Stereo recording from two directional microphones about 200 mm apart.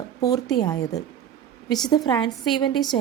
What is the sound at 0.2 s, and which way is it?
Speech, 20° left (ahead or behind).